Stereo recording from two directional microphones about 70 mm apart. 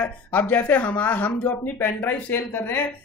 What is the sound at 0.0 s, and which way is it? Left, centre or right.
A woman's voice, left.